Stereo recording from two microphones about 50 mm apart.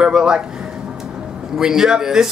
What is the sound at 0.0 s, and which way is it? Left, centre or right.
Speech, centre.